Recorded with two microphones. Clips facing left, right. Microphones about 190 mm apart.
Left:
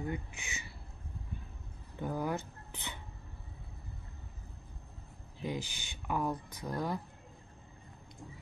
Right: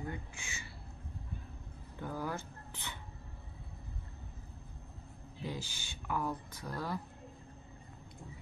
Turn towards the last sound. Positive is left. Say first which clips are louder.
# left 4 dB
turn(degrees=15)  # may be behind; listen again after turning